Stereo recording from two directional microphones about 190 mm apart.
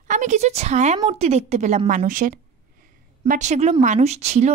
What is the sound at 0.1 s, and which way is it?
A woman's voice, 40° right (ahead or behind).